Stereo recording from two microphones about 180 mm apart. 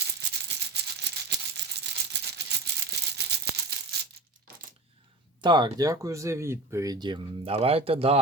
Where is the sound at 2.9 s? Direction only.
65° right (ahead or behind).